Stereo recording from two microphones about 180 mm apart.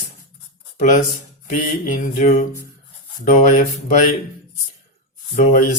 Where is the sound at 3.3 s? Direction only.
40° left (ahead or behind).